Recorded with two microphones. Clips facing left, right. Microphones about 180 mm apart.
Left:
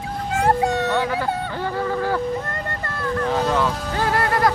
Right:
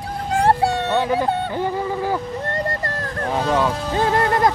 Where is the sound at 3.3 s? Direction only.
15° right (ahead or behind).